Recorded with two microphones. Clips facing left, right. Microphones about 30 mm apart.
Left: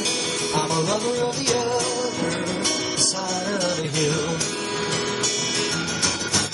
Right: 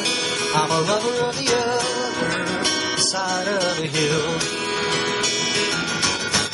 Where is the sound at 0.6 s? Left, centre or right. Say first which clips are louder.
Right 3 dB; right.